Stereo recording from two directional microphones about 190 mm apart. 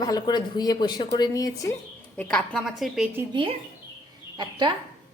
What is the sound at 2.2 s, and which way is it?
Speech, 5° left (ahead or behind).